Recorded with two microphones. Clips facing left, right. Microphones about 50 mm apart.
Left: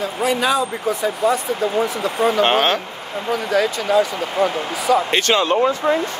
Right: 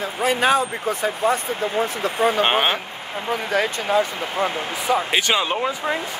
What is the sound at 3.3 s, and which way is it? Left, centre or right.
Speech, right.